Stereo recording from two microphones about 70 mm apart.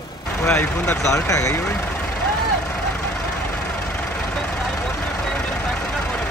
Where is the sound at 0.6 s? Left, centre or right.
Left.